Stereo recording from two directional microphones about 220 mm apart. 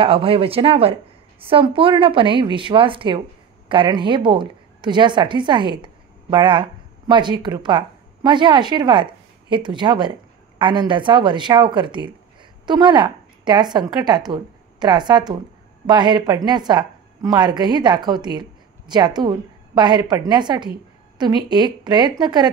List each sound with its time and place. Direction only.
0.0 s a woman's voice: 25° right (ahead or behind)